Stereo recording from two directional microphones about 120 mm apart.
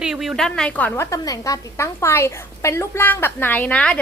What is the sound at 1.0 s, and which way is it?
A woman's voice, 30° left (ahead or behind).